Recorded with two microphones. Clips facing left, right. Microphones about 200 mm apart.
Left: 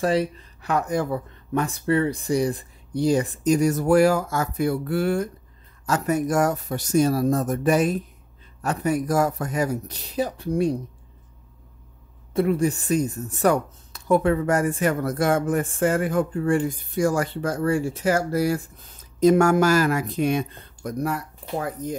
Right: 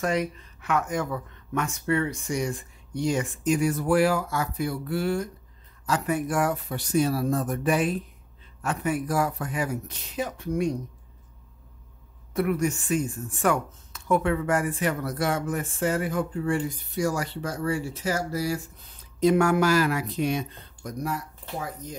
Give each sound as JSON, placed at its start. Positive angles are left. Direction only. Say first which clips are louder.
{"t": 0.0, "sound": "speech", "louder": "left 4 dB", "side_deg": 30}
{"t": 5.9, "sound": "speech", "louder": "left 4 dB", "side_deg": 45}
{"t": 12.4, "sound": "speech", "louder": "left 4 dB", "side_deg": 30}